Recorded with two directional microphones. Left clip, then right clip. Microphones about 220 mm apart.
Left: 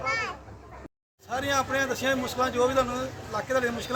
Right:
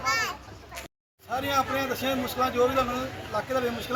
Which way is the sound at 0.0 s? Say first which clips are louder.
Right 2 dB; 50° right (ahead or behind).